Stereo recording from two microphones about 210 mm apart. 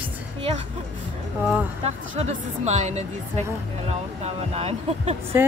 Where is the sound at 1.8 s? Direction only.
30° right (ahead or behind).